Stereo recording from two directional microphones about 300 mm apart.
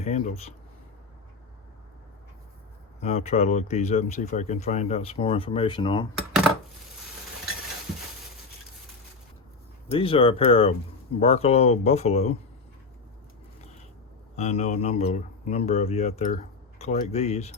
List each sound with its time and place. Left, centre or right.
0.0 s speech: left
3.0 s speech: left
9.9 s speech: centre
14.3 s speech: left